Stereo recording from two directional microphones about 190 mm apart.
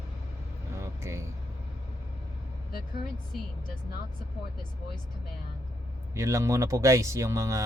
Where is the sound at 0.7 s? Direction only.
15° right (ahead or behind).